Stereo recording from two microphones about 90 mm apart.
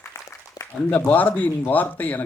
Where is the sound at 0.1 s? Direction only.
35° left (ahead or behind).